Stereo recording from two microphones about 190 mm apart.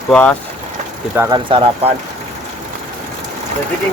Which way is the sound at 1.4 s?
25° right (ahead or behind).